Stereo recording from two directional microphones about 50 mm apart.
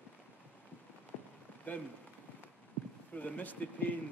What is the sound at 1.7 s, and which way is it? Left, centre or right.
Speech, left.